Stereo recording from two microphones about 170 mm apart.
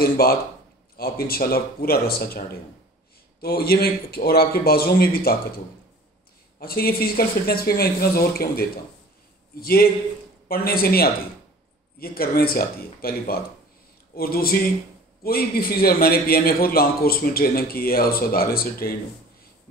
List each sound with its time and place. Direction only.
0.0 s a man's voice: 60° left (ahead or behind)
6.6 s a man's voice: 60° left (ahead or behind)